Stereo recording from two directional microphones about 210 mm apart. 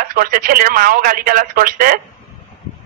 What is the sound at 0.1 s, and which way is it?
Speech, 45° right (ahead or behind).